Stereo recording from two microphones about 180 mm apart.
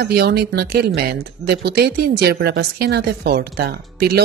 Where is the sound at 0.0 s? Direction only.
65° right (ahead or behind).